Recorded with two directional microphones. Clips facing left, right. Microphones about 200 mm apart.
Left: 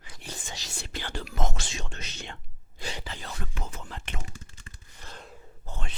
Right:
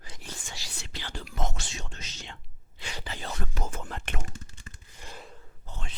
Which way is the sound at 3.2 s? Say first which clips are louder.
Right 3 dB; 40° right (ahead or behind).